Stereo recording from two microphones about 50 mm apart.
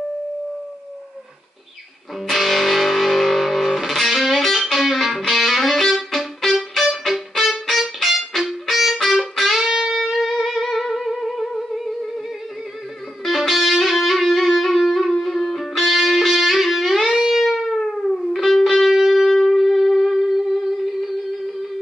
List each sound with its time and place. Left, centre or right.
2.2 s music: centre
13.2 s music: centre
17.1 s music: centre
17.4 s music: centre